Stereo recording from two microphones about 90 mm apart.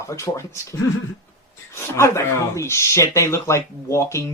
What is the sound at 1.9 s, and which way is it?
Speech, 30° left (ahead or behind).